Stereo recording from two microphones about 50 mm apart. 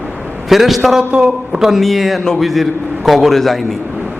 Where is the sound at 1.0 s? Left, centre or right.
Right.